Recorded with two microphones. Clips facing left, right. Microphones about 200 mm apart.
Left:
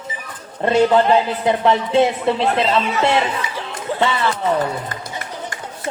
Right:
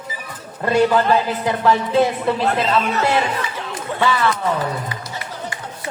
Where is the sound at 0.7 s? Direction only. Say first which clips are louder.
Left 2 dB; 25° left (ahead or behind).